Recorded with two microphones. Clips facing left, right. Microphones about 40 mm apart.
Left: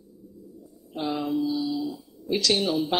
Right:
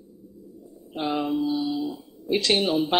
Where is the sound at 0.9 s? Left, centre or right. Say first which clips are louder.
Right 2 dB; right.